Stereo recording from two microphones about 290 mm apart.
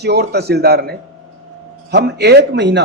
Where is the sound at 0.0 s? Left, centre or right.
Right.